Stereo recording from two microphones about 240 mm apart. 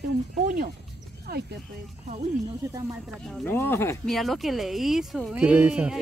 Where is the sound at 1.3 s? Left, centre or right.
Right.